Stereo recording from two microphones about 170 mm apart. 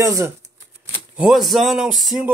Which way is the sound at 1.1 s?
Centre (ahead or behind).